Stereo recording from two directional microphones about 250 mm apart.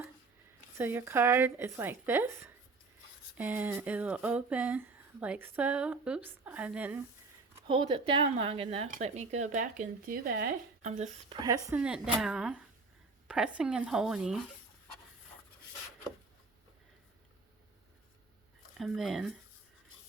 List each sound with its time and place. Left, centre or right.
0.8 s speech: centre
7.7 s speech: centre
11.3 s speech: centre
18.8 s speech: centre